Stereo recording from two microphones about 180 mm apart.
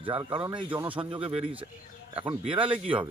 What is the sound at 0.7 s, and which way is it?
Speech, 10° right (ahead or behind).